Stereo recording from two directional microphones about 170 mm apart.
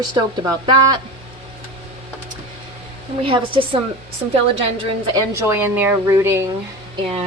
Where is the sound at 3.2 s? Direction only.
30° right (ahead or behind).